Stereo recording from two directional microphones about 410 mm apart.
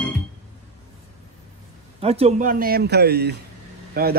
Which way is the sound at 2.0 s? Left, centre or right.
Centre.